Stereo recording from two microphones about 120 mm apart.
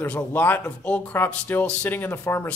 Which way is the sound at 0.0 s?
15° left (ahead or behind).